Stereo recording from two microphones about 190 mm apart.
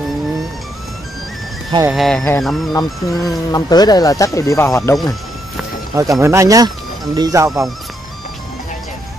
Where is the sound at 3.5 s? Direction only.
20° left (ahead or behind).